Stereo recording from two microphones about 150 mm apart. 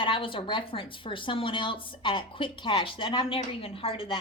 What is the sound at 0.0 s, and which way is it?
A woman's voice, 35° left (ahead or behind).